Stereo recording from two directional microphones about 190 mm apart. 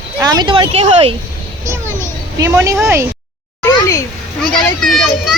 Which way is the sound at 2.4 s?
15° right (ahead or behind).